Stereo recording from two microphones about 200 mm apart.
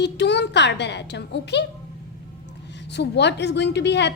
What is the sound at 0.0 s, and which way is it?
A woman's voice, 60° left (ahead or behind).